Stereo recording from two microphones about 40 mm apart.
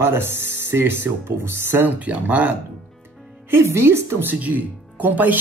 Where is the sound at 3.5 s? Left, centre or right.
Right.